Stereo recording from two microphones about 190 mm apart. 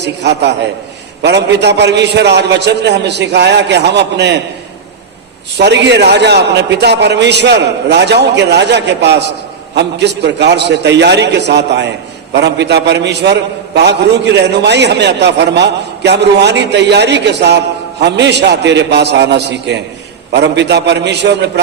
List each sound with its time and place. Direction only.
0.0 s a man's voice: 65° right (ahead or behind)
5.5 s a man's voice: 65° right (ahead or behind)